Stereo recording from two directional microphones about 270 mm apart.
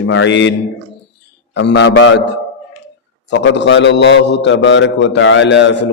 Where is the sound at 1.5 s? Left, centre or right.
Left.